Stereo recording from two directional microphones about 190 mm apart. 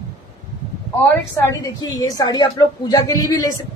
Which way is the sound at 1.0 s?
15° left (ahead or behind).